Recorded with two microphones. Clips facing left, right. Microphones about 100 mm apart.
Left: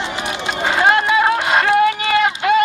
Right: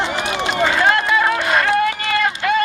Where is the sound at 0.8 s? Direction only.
25° left (ahead or behind).